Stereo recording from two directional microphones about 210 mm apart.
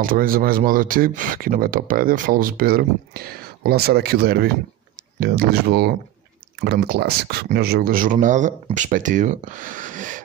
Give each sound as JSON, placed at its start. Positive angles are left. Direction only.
{"t": 0.0, "sound": "speech", "side_deg": -40}